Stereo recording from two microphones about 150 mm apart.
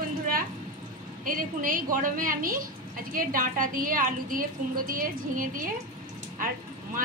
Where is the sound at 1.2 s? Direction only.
65° right (ahead or behind).